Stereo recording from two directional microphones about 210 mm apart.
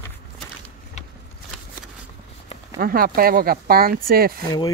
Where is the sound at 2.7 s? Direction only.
45° right (ahead or behind).